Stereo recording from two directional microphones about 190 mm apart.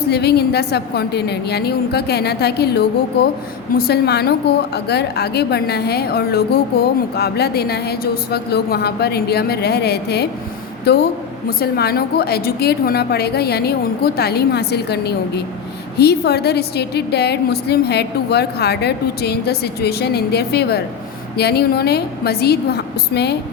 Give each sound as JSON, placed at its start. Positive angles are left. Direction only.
{"t": 0.0, "sound": "a woman's voice", "side_deg": 60}